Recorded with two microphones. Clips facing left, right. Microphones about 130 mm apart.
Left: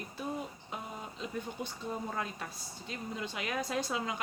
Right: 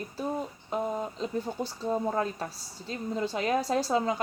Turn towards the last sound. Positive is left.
turn(degrees=-40)  # may be behind; listen again after turning